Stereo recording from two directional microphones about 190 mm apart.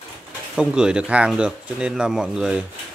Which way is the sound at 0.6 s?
5° right (ahead or behind).